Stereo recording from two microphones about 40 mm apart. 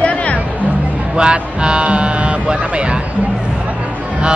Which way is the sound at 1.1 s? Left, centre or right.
Right.